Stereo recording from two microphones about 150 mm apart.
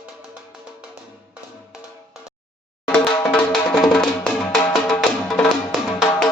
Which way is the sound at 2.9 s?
5° left (ahead or behind).